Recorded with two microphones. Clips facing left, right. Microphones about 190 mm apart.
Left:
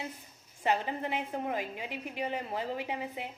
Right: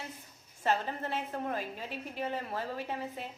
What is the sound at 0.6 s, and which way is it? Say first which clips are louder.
A woman's voice: left 1 dB; 15° left (ahead or behind).